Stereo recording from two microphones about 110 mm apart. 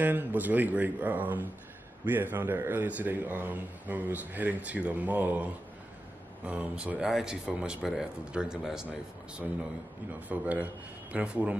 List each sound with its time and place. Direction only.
0.0 s a man's voice: 15° right (ahead or behind)
10.2 s a man's voice: 15° right (ahead or behind)